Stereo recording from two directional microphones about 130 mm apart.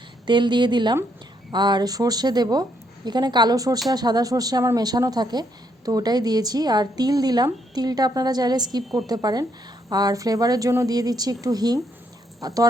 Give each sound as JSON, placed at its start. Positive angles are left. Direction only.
{"t": 0.3, "sound": "a woman's voice", "side_deg": -35}